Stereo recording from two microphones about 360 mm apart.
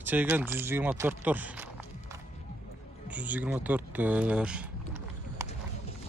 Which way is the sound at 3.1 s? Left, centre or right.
Centre.